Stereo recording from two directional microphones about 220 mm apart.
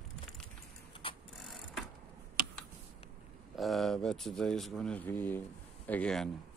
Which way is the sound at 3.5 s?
Centre (ahead or behind).